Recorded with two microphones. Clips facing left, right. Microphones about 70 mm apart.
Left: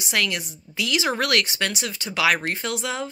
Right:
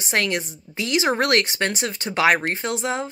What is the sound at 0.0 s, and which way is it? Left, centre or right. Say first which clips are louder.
Speech: right 2 dB; right.